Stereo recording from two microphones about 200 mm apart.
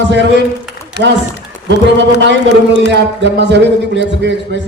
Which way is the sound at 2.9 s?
60° right (ahead or behind).